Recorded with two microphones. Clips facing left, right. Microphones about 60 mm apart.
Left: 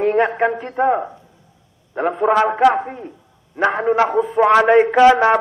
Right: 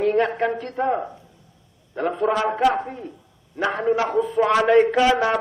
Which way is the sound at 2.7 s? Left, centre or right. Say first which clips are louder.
Left 4 dB; left.